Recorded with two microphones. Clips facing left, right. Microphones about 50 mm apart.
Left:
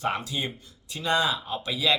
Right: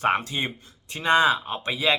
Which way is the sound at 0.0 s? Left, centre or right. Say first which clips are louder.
Right 5 dB; right.